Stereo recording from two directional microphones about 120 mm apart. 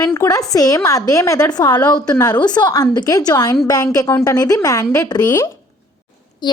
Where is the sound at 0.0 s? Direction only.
30° left (ahead or behind).